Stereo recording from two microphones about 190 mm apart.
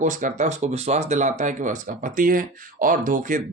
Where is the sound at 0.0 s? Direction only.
40° right (ahead or behind).